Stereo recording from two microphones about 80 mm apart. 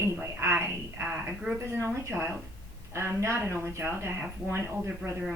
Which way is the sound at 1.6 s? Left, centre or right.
Right.